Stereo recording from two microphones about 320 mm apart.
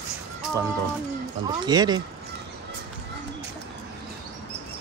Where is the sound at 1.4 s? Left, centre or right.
Centre.